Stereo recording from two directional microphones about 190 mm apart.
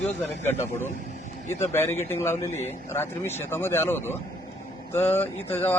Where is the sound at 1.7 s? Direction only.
15° left (ahead or behind).